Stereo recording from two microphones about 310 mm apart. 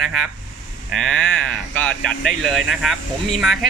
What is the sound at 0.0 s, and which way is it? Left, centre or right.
Speech, centre.